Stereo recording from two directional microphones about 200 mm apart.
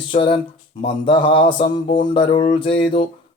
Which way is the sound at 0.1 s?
25° left (ahead or behind).